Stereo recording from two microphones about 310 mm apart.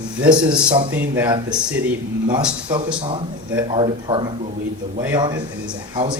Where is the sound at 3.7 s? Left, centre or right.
Centre.